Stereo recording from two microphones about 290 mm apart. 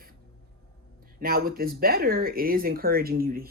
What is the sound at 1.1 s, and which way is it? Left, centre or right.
Speech, right.